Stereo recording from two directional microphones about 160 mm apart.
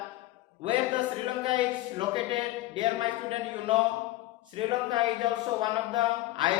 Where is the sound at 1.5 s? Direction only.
30° right (ahead or behind).